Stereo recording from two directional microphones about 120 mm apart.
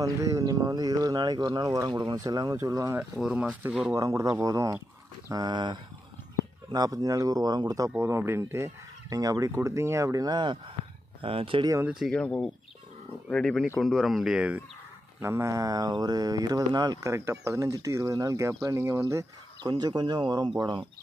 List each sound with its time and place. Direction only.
0.0 s speech: 30° right (ahead or behind)
3.2 s speech: 5° right (ahead or behind)
3.9 s speech: 25° right (ahead or behind)
8.0 s speech: 20° right (ahead or behind); by 11.6 s 50° right (ahead or behind)
11.8 s speech: 5° right (ahead or behind)
12.1 s speech: 5° left (ahead or behind); by 14.6 s 10° right (ahead or behind)
15.1 s speech: 25° right (ahead or behind)
17.1 s speech: 25° right (ahead or behind)
19.7 s speech: 35° right (ahead or behind)